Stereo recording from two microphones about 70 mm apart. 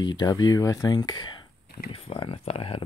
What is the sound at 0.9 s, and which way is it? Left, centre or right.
Speech, left.